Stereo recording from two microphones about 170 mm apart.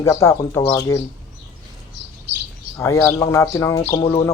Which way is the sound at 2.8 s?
15° left (ahead or behind).